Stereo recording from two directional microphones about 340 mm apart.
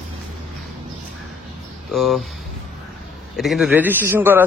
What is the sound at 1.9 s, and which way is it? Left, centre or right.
Speech, centre.